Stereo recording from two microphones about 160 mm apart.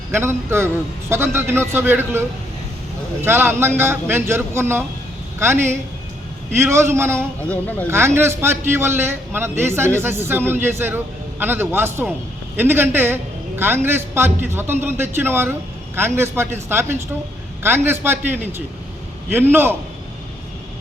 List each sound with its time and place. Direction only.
0.1 s a man's voice: 15° right (ahead or behind)
7.4 s speech: 10° left (ahead or behind)
7.9 s a man's voice: 15° right (ahead or behind)